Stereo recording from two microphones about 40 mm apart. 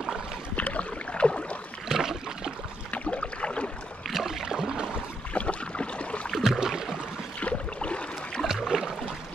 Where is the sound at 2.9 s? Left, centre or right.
Left.